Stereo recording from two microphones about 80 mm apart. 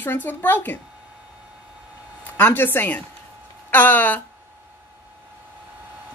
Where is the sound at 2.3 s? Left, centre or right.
Left.